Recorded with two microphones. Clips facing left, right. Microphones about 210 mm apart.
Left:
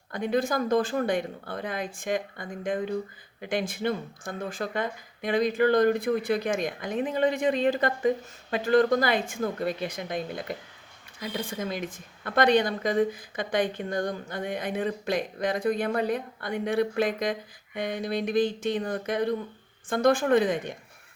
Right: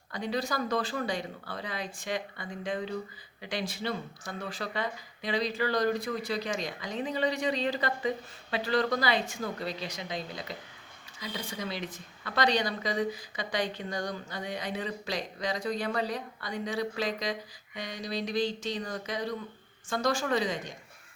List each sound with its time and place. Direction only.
0.1 s speech: 50° left (ahead or behind)